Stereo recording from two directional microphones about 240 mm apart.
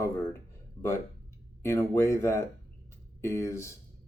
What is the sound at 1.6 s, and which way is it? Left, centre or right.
Speech, centre.